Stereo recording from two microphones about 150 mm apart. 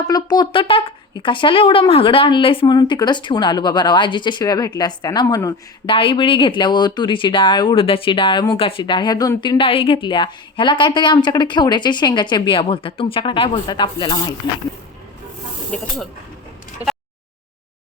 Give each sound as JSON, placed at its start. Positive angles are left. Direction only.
{"t": 0.1, "sound": "speech", "side_deg": 30}
{"t": 5.8, "sound": "speech", "side_deg": 35}